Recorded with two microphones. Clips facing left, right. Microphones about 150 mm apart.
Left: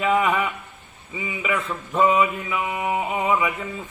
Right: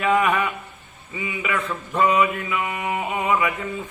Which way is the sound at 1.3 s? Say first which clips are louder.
Left 2 dB; 20° left (ahead or behind).